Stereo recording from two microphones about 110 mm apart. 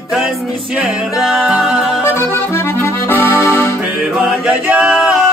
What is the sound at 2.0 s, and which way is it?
Accordion, 25° left (ahead or behind).